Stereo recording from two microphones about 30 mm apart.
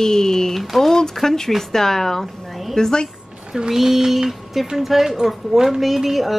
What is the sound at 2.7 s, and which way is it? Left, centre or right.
Speech, left.